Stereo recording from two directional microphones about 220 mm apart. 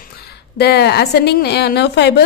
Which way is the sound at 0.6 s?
45° left (ahead or behind).